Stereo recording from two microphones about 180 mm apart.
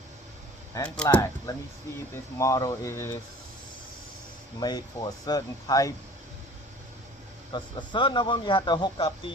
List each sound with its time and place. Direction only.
0.7 s speech: 15° left (ahead or behind)
1.5 s speech: 20° left (ahead or behind)
4.6 s speech: 20° left (ahead or behind)
7.5 s speech: 25° left (ahead or behind)